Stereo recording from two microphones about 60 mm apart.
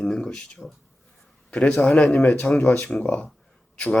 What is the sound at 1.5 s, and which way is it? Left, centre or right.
Speech, centre.